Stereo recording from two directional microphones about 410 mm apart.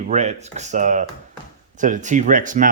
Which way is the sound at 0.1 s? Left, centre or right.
Centre.